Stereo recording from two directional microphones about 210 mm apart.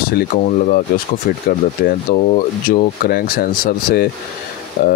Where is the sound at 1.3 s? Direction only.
45° left (ahead or behind).